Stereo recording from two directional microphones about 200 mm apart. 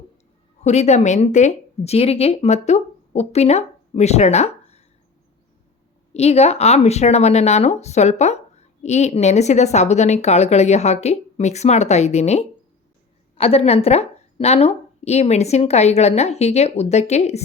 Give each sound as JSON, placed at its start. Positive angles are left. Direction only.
{"t": 0.6, "sound": "speech", "side_deg": 35}
{"t": 6.1, "sound": "speech", "side_deg": 30}